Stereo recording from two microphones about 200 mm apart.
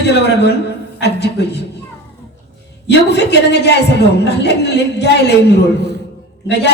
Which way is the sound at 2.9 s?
60° left (ahead or behind).